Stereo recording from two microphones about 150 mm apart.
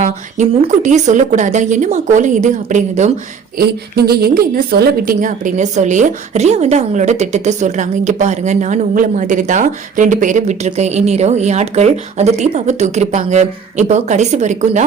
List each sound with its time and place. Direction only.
0.3 s a woman's voice: 50° right (ahead or behind)
3.6 s a woman's voice: 90° right; by 14.8 s 50° right (ahead or behind)